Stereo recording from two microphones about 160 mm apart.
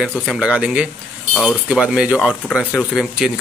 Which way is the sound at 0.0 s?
Centre (ahead or behind).